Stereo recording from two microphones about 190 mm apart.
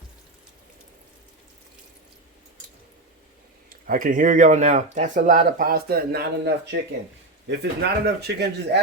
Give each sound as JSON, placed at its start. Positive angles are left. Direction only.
{"t": 3.8, "sound": "speech", "side_deg": -45}